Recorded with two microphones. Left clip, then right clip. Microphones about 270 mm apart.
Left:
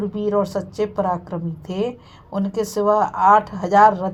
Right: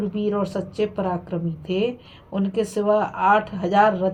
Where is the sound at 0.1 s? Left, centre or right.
Left.